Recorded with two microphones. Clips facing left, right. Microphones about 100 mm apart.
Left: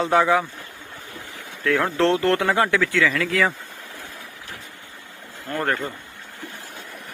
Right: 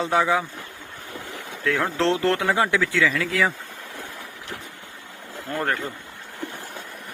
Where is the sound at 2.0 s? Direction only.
20° right (ahead or behind).